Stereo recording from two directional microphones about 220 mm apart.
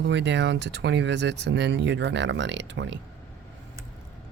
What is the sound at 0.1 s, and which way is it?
Speech, 50° right (ahead or behind).